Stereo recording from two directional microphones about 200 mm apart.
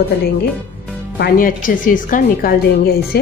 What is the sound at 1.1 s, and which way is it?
Speech, 50° left (ahead or behind).